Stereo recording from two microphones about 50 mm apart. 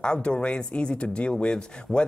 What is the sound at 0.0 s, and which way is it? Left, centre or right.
Speech, centre.